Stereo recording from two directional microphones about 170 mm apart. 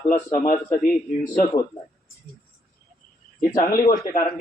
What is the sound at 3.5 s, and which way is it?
Speech, 55° left (ahead or behind).